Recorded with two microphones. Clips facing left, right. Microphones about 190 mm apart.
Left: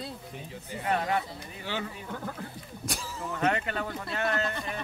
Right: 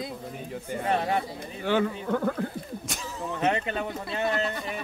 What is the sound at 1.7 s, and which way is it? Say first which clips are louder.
Speech: right 11 dB; 55° right (ahead or behind).